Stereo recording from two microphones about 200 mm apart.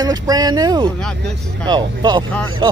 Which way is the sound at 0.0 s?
20° right (ahead or behind).